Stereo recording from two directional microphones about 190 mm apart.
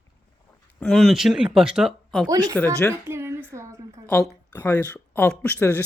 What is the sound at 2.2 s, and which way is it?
Speech, 20° right (ahead or behind).